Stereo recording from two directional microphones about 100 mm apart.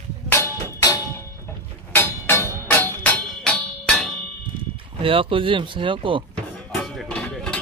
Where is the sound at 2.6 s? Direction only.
20° left (ahead or behind).